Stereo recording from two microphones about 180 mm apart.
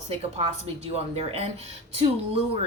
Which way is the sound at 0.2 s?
35° right (ahead or behind).